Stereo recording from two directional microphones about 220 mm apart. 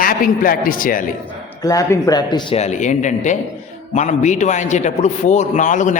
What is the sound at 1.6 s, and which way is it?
A man's voice, 15° left (ahead or behind).